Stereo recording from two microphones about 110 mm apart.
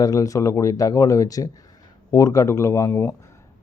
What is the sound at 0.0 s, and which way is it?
A man's voice, 35° left (ahead or behind).